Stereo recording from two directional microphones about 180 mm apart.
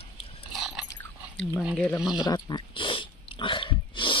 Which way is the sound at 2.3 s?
25° left (ahead or behind).